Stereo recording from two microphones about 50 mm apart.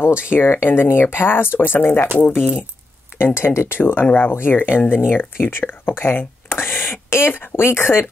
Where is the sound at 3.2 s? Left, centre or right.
Left.